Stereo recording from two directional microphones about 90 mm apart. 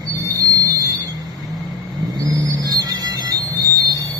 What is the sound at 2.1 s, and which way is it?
Music, 45° right (ahead or behind).